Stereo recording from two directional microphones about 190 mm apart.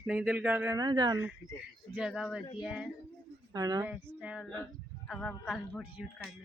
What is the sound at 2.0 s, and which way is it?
Speech, 5° right (ahead or behind).